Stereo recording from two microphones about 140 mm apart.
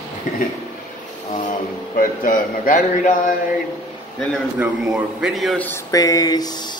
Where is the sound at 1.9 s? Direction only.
70° left (ahead or behind).